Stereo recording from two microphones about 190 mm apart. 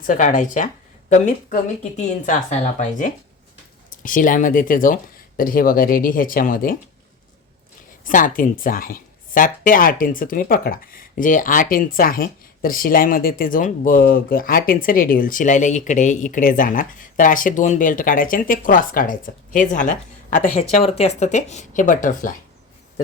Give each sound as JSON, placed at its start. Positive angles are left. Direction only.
{"t": 0.0, "sound": "a woman's voice", "side_deg": 45}
{"t": 8.0, "sound": "speech", "side_deg": 45}